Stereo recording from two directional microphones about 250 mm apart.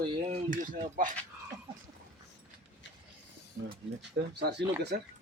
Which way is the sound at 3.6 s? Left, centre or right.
Right.